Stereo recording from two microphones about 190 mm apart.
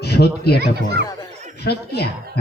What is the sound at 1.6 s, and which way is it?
Speech, 60° left (ahead or behind).